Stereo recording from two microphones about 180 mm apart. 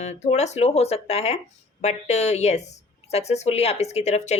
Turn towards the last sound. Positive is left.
turn(degrees=40)  # may be behind; listen again after turning